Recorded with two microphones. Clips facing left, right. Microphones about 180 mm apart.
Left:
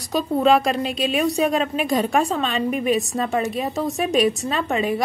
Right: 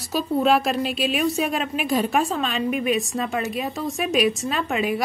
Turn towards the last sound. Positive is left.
turn(degrees=0)  # may be behind; listen again after turning